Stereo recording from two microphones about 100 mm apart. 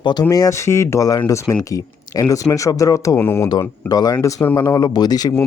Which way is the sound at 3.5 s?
40° left (ahead or behind).